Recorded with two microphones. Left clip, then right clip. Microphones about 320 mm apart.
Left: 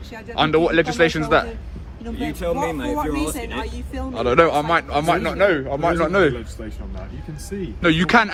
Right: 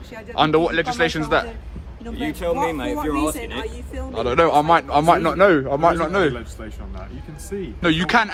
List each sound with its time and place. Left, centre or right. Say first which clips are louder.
0.1 s a man's voice: right 1 dB; centre
2.1 s speech: right 1 dB; right
2.6 s a man's voice: right 1 dB; centre
3.3 s speech: left 1 dB; centre
4.1 s a man's voice: even; centre
6.0 s a man's voice: left 2 dB; centre
7.8 s a man's voice: left 2 dB; centre